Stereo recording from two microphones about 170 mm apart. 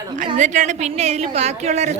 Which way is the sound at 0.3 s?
45° right (ahead or behind).